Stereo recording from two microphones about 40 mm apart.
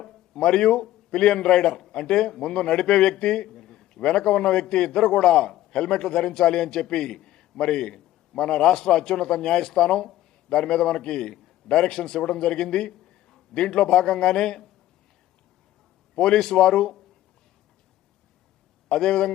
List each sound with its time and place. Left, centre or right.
0.3 s a man's voice: centre
16.1 s a man's voice: centre
18.9 s a man's voice: centre